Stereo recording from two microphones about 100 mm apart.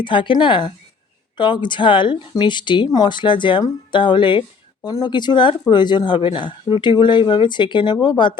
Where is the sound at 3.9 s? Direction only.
50° left (ahead or behind).